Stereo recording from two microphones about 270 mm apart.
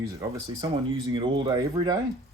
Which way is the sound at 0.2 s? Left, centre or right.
Centre.